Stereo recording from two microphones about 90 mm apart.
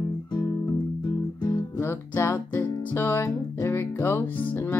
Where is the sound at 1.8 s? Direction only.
30° left (ahead or behind).